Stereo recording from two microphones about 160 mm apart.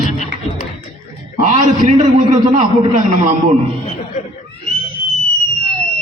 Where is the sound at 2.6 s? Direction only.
50° right (ahead or behind).